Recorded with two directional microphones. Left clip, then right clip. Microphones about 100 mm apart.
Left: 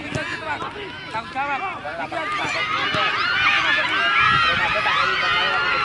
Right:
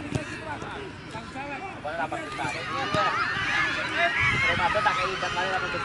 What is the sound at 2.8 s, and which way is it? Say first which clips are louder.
Speech: left 1 dB; 20° right (ahead or behind).